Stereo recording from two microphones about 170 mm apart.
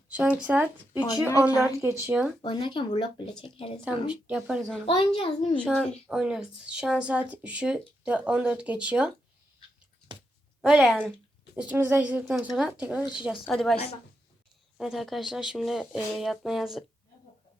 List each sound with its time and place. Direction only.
0.1 s speech: 5° right (ahead or behind)
0.9 s a woman's voice: 20° left (ahead or behind)
1.6 s speech: 15° right (ahead or behind)
2.4 s speech: 25° left (ahead or behind)
3.8 s speech: 5° right (ahead or behind)
4.9 s a child's voice: 30° left (ahead or behind)
5.5 s speech: 5° left (ahead or behind)
10.6 s speech: 5° right (ahead or behind)
14.8 s speech: centre (ahead or behind)